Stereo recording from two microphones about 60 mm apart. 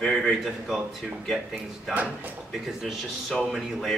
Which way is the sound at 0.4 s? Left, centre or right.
Centre.